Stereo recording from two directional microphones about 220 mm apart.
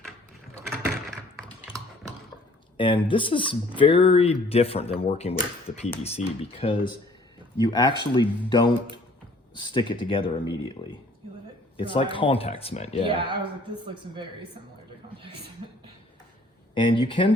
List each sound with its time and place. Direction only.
2.7 s speech: 20° left (ahead or behind)
11.8 s speech: 20° left (ahead or behind)
13.1 s speech: 20° right (ahead or behind)
16.7 s speech: 20° left (ahead or behind)